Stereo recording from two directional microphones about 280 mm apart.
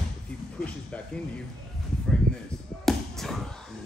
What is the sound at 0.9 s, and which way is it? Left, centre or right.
Speech, centre.